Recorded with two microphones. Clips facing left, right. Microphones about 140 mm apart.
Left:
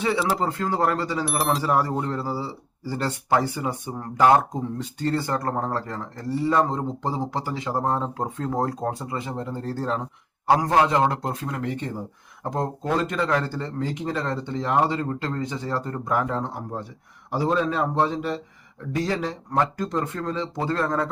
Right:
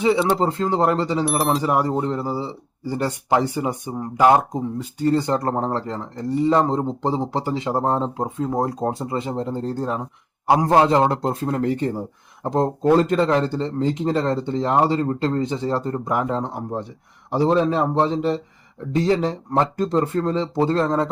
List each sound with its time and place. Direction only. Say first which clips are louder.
0.0 s speech: right 5 dB; 15° right (ahead or behind)
1.2 s speech: right 4 dB; centre (ahead or behind)
1.6 s speech: right 3 dB; 15° right (ahead or behind)
8.2 s speech: right 3 dB; 10° right (ahead or behind)
8.8 s speech: right 5 dB; 25° right (ahead or behind)
10.7 s speech: right 7 dB; 30° right (ahead or behind)
12.4 s speech: right 7 dB; 25° right (ahead or behind)